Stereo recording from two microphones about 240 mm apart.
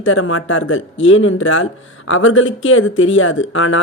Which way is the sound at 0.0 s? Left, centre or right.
Left.